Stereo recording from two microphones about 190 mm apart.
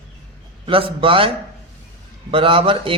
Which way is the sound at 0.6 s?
30° right (ahead or behind).